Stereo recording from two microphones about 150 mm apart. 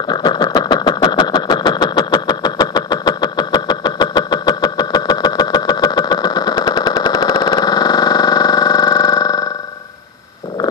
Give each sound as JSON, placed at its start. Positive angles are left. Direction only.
{"t": 0.1, "sound": "engine", "side_deg": 30}